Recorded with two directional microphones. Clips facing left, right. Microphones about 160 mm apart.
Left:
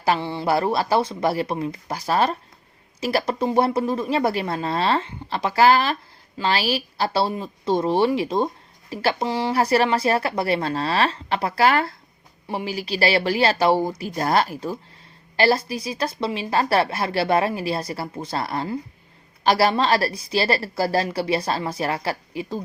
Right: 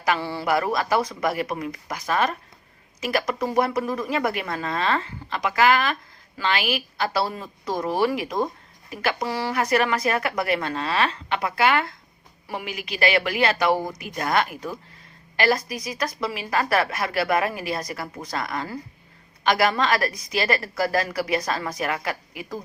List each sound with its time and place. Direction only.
0.0 s a woman's voice: 25° left (ahead or behind)
9.6 s a woman's voice: 30° left (ahead or behind)